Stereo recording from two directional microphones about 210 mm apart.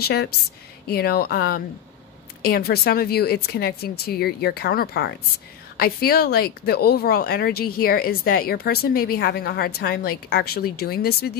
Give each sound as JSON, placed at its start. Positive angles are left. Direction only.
{"t": 0.0, "sound": "speech", "side_deg": 50}